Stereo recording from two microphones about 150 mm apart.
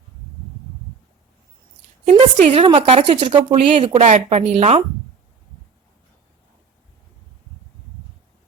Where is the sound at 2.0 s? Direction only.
45° right (ahead or behind).